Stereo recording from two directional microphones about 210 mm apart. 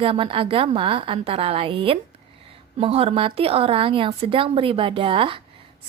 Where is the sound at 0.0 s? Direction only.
25° right (ahead or behind).